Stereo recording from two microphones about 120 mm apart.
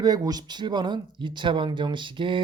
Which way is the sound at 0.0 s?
30° right (ahead or behind).